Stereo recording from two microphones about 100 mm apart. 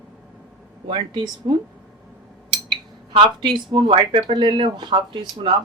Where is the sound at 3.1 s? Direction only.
50° right (ahead or behind).